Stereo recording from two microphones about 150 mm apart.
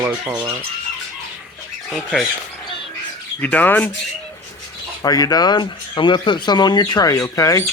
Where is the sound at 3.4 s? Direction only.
10° left (ahead or behind).